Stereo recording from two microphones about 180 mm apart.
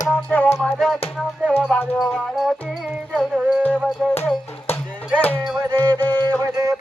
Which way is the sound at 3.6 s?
10° left (ahead or behind).